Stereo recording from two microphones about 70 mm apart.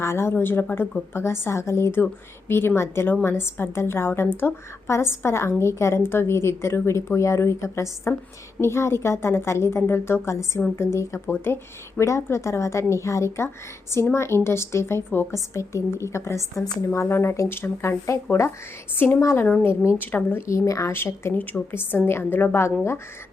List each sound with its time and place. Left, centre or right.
0.0 s a woman's voice: left
1.1 s a woman's voice: left
18.9 s a woman's voice: left
19.2 s a woman's voice: left
20.5 s speech: left
21.3 s a woman's voice: left